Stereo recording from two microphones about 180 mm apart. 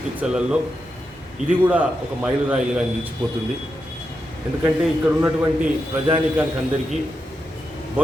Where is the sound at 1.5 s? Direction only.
10° right (ahead or behind).